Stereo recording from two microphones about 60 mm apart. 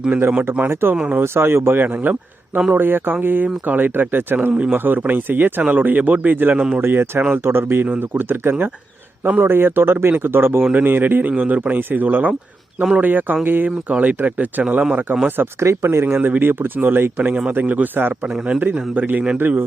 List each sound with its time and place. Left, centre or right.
0.3 s speech: right
0.7 s speech: right
4.5 s speech: right
4.9 s speech: right
6.8 s speech: right
13.7 s speech: right
15.6 s speech: right